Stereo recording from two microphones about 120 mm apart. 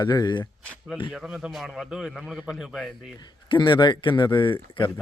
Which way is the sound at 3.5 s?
40° left (ahead or behind).